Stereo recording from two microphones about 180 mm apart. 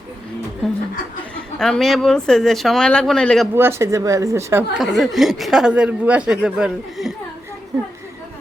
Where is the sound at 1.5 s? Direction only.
5° left (ahead or behind).